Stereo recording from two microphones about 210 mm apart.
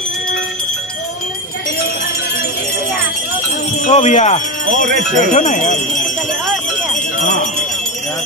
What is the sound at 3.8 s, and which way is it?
Speech, 35° left (ahead or behind).